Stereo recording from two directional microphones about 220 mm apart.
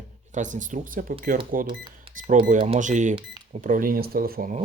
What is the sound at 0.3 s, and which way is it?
Speech, 35° right (ahead or behind).